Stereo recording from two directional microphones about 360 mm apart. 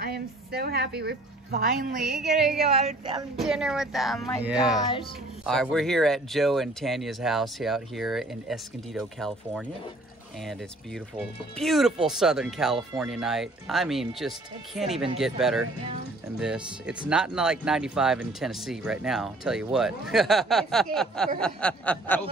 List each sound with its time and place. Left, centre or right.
0.0 s speech: right
2.0 s speech: centre
2.8 s speech: centre
3.3 s speech: centre
11.5 s speech: centre